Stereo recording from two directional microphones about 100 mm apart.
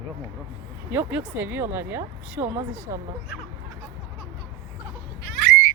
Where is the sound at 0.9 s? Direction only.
20° right (ahead or behind).